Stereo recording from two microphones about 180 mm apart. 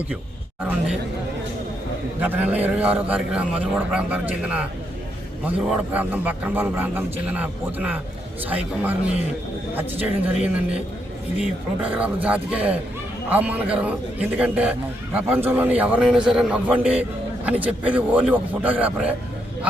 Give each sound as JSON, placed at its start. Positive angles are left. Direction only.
{"t": 2.2, "sound": "a man's voice", "side_deg": -10}
{"t": 10.4, "sound": "a man's voice", "side_deg": -5}